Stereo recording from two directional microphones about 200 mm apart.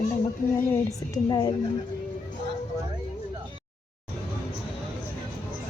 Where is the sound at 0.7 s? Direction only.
15° left (ahead or behind).